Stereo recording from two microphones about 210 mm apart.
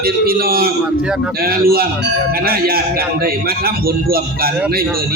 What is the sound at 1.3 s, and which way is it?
A man's voice, 45° right (ahead or behind).